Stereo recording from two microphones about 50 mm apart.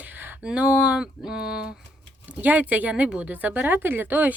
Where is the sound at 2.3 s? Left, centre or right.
Right.